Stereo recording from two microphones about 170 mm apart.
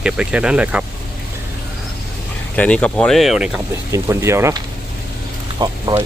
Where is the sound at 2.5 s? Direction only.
10° left (ahead or behind).